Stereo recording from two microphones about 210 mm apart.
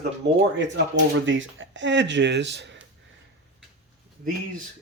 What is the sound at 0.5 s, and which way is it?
Speech, 60° right (ahead or behind).